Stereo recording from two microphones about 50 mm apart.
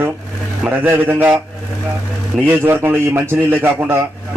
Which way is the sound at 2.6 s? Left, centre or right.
Right.